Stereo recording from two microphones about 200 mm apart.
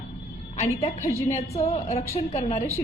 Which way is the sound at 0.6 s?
35° left (ahead or behind).